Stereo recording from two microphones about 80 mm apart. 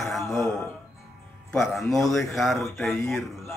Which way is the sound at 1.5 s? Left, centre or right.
Centre.